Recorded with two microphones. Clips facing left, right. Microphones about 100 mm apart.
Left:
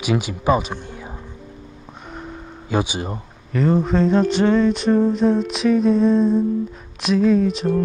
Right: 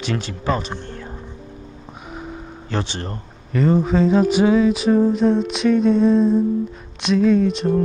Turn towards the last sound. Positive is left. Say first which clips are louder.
# right 1 dB
turn(degrees=0)  # may be behind; listen again after turning